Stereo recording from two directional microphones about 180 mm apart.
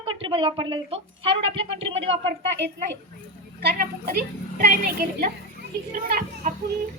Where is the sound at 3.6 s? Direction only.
55° right (ahead or behind).